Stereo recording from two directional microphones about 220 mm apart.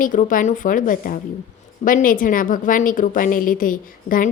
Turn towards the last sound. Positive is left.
turn(degrees=40)  # may be behind; listen again after turning